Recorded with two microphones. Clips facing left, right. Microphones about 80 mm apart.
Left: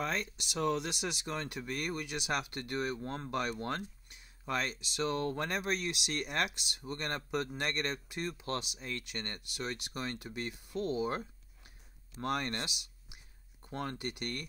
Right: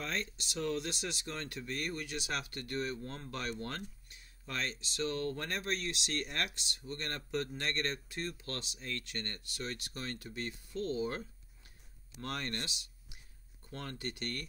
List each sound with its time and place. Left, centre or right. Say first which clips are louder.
0.0 s speech: left 3 dB; centre
12.6 s a sound: left 2 dB; centre
13.6 s speech: left 5 dB; left